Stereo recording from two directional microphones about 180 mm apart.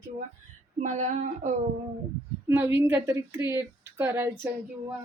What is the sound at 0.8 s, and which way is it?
Speech, 40° right (ahead or behind).